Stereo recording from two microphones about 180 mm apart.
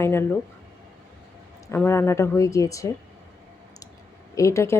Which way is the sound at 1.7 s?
15° left (ahead or behind).